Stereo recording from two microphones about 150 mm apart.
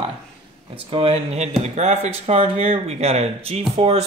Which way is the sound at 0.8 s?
40° right (ahead or behind).